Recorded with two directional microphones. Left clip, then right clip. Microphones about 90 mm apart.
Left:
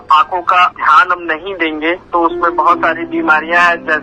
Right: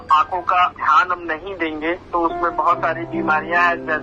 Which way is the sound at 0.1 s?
45° left (ahead or behind).